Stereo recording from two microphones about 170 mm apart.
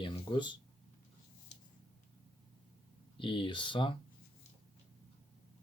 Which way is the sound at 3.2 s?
30° left (ahead or behind).